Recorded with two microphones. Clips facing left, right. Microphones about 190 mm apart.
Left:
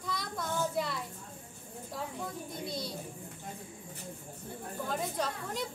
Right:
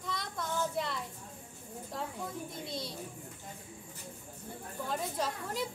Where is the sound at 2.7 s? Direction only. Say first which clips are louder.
Left 3 dB; centre (ahead or behind).